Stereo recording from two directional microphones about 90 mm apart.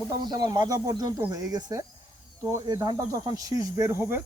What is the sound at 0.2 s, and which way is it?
Speech, 50° right (ahead or behind).